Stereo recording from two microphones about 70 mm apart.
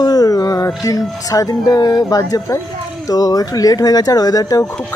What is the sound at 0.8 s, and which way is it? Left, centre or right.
Speech, left.